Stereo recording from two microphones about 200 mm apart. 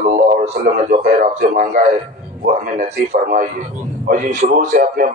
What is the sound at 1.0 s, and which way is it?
A man's voice, 35° right (ahead or behind).